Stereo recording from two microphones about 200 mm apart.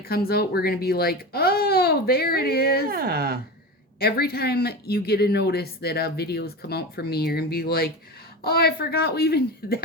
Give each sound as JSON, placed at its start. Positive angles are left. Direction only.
{"t": 0.1, "sound": "speech", "side_deg": 50}
{"t": 2.8, "sound": "speech", "side_deg": -50}
{"t": 4.0, "sound": "speech", "side_deg": 50}